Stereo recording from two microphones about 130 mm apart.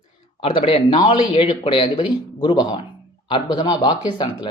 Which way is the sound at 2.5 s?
35° left (ahead or behind).